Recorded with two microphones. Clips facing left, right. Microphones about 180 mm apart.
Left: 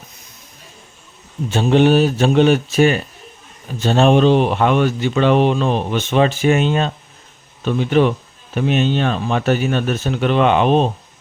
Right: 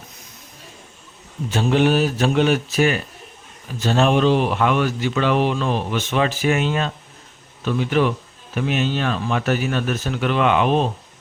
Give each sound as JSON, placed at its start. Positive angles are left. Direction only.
{"t": 1.5, "sound": "speech", "side_deg": 25}